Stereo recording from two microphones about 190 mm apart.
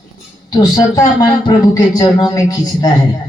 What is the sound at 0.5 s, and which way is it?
Speech, 20° left (ahead or behind).